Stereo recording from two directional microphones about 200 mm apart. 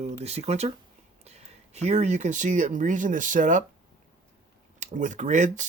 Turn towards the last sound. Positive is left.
turn(degrees=-35)  # may be behind; listen again after turning